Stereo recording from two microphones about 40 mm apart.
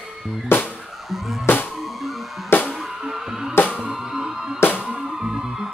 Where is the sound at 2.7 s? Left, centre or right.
Centre.